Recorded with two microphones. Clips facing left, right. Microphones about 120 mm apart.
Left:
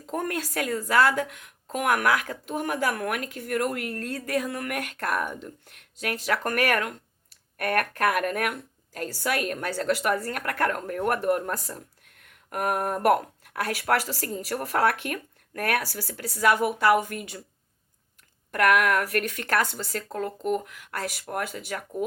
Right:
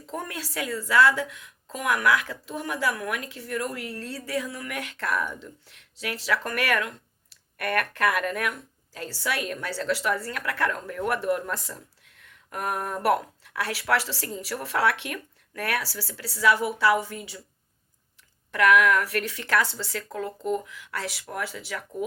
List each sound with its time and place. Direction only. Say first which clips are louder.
0.0 s a woman's voice: left 5 dB; 50° left (ahead or behind)
18.5 s a woman's voice: right 1 dB; 50° left (ahead or behind)
20.4 s a woman's voice: even; 60° left (ahead or behind)